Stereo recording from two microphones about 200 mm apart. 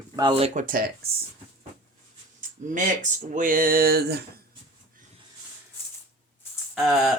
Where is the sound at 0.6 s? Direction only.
45° right (ahead or behind).